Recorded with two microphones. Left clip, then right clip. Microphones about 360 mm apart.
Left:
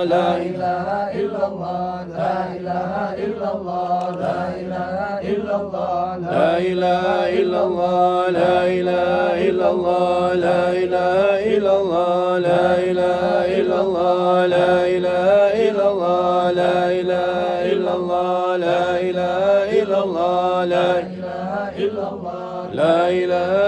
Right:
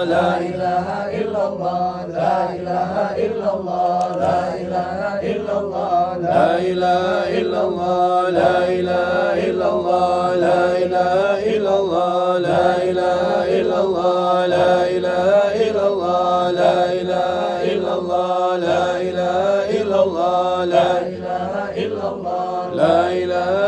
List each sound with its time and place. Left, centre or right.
6.6 s mantra: centre
10.3 s mantra: centre
22.8 s mantra: centre